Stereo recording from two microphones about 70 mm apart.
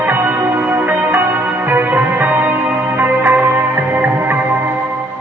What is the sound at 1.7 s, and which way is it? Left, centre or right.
Music, right.